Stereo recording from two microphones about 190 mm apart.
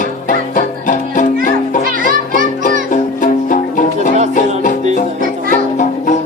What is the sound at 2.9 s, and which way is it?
Music, 45° left (ahead or behind).